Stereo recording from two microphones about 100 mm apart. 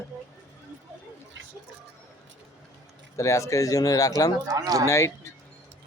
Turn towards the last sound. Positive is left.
turn(degrees=30)  # may be behind; listen again after turning